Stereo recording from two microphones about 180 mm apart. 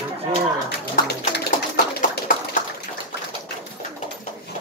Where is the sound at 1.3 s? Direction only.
65° left (ahead or behind).